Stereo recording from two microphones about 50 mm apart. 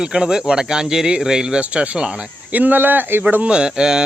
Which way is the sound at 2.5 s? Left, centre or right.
Right.